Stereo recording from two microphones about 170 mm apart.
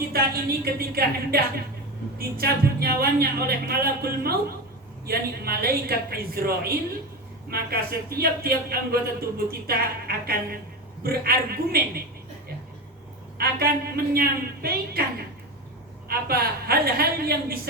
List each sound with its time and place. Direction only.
0.1 s a man's voice: 65° right (ahead or behind)
13.4 s a man's voice: 65° right (ahead or behind)
16.0 s a man's voice: 65° right (ahead or behind)